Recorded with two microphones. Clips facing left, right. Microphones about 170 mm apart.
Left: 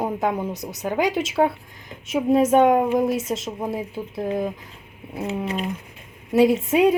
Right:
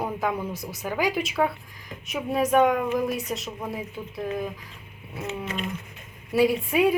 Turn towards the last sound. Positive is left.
turn(degrees=20)  # may be behind; listen again after turning